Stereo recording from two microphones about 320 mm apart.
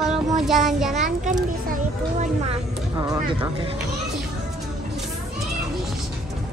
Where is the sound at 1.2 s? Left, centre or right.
Right.